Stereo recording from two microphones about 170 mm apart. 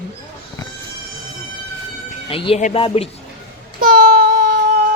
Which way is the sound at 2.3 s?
30° left (ahead or behind).